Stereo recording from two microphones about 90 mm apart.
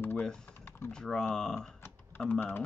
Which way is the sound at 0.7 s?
25° left (ahead or behind).